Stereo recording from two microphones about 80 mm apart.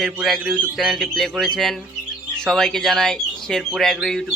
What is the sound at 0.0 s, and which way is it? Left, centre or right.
A man's voice, centre.